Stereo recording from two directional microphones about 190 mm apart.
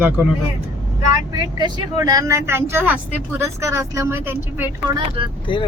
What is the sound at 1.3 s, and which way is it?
Speech, 20° right (ahead or behind).